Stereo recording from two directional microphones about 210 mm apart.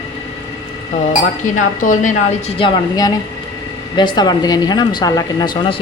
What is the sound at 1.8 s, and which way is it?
Speech, 35° left (ahead or behind).